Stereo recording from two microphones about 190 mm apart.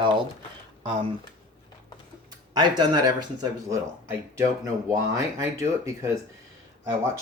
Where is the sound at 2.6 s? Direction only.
20° right (ahead or behind).